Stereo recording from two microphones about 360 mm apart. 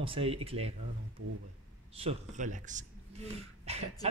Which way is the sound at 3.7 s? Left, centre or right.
Centre.